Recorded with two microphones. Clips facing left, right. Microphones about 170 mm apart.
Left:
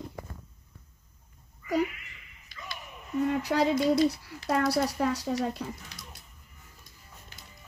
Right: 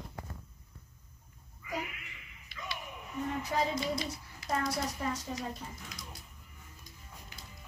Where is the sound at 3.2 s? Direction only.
75° left (ahead or behind).